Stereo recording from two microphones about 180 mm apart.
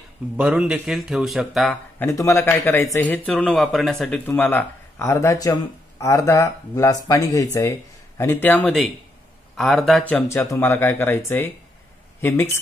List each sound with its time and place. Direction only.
0.4 s speech: 5° right (ahead or behind)
2.0 s speech: 15° left (ahead or behind)